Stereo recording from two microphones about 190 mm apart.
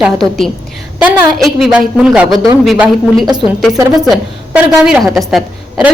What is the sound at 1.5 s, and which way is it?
A woman's voice, centre (ahead or behind).